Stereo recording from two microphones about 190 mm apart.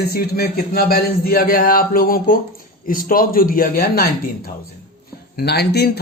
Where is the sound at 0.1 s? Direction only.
55° left (ahead or behind).